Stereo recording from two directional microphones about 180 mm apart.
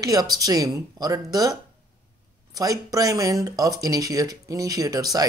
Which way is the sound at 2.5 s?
20° right (ahead or behind).